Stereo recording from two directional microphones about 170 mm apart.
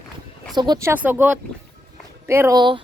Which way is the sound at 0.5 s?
25° right (ahead or behind).